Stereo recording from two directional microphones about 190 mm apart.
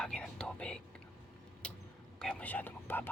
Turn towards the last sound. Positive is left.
turn(degrees=10)  # may be behind; listen again after turning